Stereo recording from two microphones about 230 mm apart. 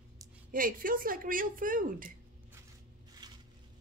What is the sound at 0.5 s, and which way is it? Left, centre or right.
A woman's voice, right.